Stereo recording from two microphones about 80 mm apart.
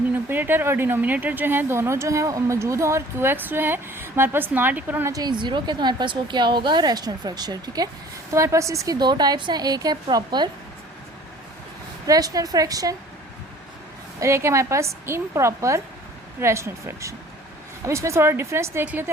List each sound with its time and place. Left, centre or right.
0.1 s speech: right
5.2 s speech: right
8.3 s a woman's voice: right
9.0 s a woman's voice: right
12.0 s a woman's voice: right
14.2 s a woman's voice: right